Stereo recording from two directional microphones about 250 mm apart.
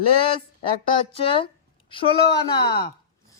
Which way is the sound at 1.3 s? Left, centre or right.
Left.